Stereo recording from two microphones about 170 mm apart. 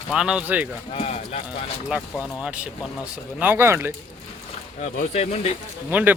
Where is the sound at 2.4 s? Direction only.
5° right (ahead or behind).